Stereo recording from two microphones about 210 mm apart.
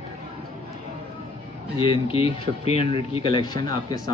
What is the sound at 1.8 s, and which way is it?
Speech, 25° left (ahead or behind).